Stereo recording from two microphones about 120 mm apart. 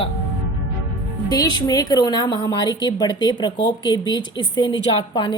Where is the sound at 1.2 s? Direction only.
30° left (ahead or behind).